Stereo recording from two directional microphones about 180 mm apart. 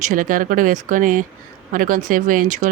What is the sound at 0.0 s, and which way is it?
Speech, 45° right (ahead or behind).